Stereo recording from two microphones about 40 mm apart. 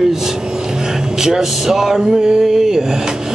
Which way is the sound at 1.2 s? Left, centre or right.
Centre.